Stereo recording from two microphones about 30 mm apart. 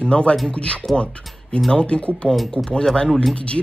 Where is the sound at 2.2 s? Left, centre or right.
Centre.